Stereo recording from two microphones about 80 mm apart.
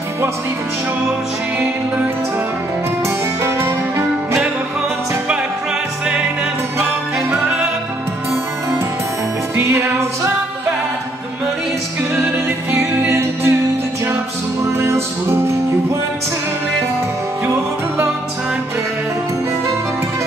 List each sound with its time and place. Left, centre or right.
3.4 s music: right
9.6 s music: right
12.7 s music: right
14.6 s music: right